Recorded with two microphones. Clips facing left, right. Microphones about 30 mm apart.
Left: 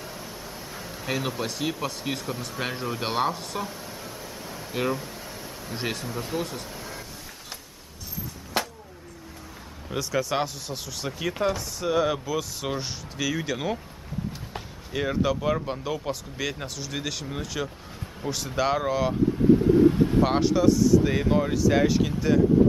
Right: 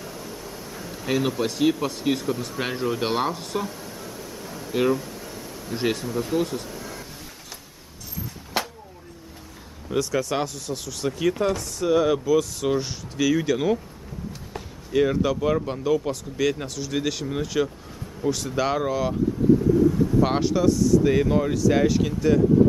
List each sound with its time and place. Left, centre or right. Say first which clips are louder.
0.0 s a sound: right 2 dB; centre
1.0 s speech: right 5 dB; centre
2.6 s a sound: right 4 dB; centre
4.7 s speech: right 6 dB; centre
5.0 s a sound: right 2 dB; centre
5.8 s speech: right 6 dB; centre
9.8 s speech: right 3 dB; centre
14.9 s speech: right 4 dB; centre
19.7 s vehicle: left 1 dB; left
20.2 s speech: even; centre